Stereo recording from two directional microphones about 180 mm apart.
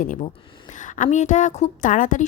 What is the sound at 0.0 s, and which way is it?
A woman's voice, 45° left (ahead or behind).